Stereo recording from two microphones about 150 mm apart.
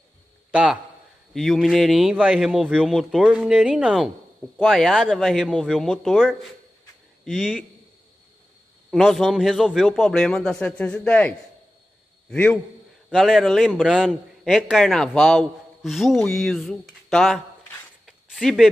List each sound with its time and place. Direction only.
0.5 s a man's voice: 10° right (ahead or behind)
8.9 s a man's voice: centre (ahead or behind)
18.0 s a sound: centre (ahead or behind)